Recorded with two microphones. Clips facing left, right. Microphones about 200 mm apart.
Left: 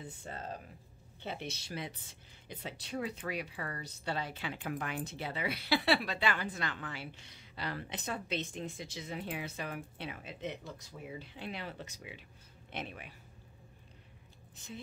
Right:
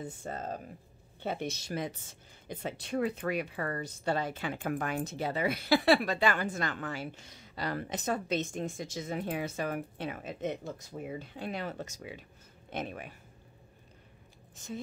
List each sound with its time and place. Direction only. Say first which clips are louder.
0.0 s speech: right 6 dB; 45° right (ahead or behind)
14.5 s speech: right 7 dB; 45° right (ahead or behind)